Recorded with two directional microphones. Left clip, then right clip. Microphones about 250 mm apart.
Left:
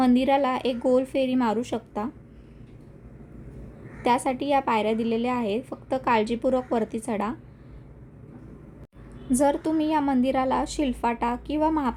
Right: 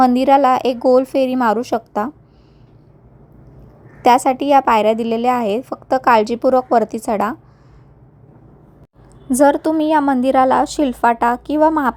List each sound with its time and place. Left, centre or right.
0.2 s a woman's voice: right
4.0 s a woman's voice: right
9.3 s a woman's voice: right